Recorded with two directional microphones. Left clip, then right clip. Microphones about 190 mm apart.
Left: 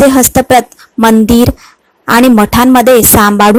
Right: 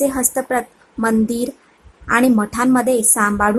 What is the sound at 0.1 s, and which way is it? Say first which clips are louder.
Speech: left 13 dB; 35° left (ahead or behind).